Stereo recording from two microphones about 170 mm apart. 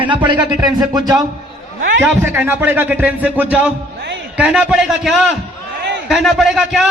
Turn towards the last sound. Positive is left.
turn(degrees=-5)  # may be behind; listen again after turning